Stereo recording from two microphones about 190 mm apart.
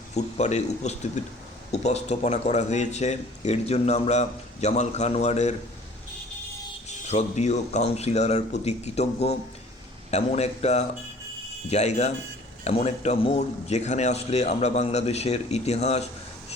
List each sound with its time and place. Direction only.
0.1 s speech: 35° left (ahead or behind)
6.8 s speech: 35° left (ahead or behind)